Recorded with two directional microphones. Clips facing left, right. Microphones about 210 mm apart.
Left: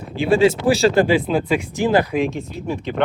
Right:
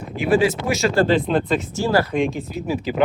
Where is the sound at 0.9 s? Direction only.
10° left (ahead or behind).